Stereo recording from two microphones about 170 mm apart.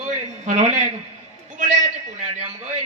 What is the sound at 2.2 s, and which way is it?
Speech, 40° right (ahead or behind).